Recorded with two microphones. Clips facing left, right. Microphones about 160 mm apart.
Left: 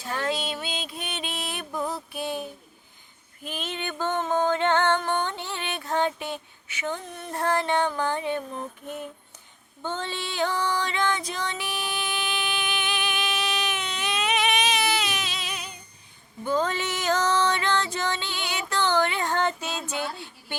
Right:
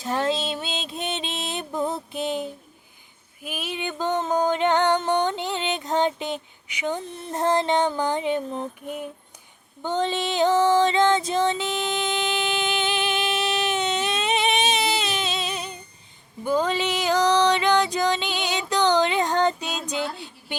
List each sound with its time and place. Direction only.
0.0 s music: 20° right (ahead or behind)
3.4 s music: 10° right (ahead or behind)
9.8 s music: 20° right (ahead or behind)
16.4 s music: 10° right (ahead or behind)